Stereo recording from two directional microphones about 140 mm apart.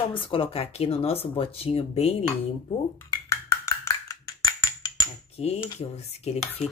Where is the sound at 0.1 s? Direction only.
40° left (ahead or behind).